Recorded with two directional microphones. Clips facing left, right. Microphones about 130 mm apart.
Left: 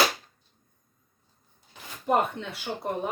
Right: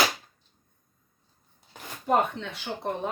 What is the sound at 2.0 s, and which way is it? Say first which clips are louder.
Speech: even; 5° left (ahead or behind).